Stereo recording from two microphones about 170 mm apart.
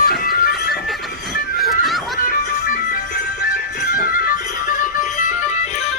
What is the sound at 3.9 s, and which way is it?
Music, 55° left (ahead or behind).